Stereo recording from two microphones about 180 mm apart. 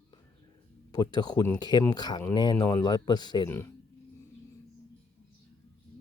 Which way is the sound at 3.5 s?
15° left (ahead or behind).